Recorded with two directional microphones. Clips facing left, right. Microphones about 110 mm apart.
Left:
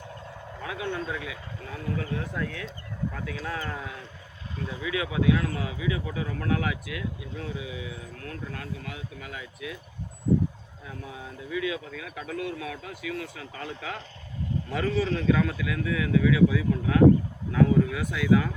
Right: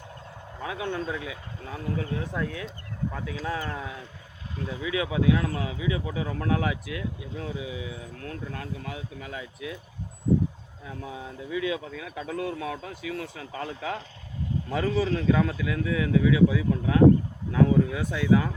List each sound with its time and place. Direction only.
0.6 s speech: 25° right (ahead or behind)
2.5 s speech: 15° right (ahead or behind); by 9.7 s 30° right (ahead or behind)
11.5 s speech: 30° right (ahead or behind)